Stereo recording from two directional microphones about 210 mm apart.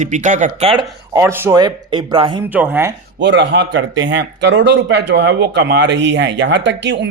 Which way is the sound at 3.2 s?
55° right (ahead or behind).